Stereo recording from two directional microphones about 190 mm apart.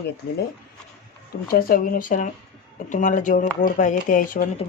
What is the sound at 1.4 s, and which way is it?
Speech, 50° left (ahead or behind).